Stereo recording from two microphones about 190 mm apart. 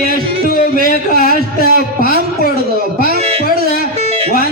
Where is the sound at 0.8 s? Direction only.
50° left (ahead or behind).